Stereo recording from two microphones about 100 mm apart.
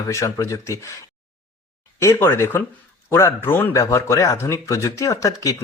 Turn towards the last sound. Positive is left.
turn(degrees=30)  # may be behind; listen again after turning